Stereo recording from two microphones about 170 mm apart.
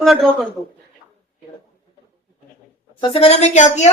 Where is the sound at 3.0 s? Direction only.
35° left (ahead or behind).